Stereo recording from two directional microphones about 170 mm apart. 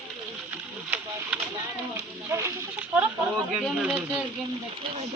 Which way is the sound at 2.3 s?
15° right (ahead or behind).